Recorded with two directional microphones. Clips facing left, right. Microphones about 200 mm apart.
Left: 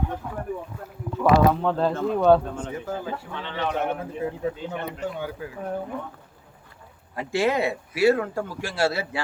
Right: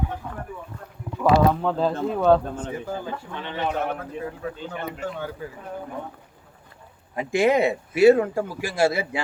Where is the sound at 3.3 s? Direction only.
15° right (ahead or behind).